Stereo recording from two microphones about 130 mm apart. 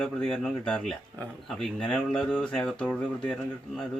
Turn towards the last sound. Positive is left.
turn(degrees=5)  # may be behind; listen again after turning